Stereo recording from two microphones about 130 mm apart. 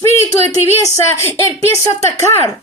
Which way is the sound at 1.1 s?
20° left (ahead or behind).